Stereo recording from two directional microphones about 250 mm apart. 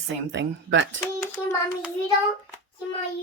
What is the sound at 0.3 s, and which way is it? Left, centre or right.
Speech, right.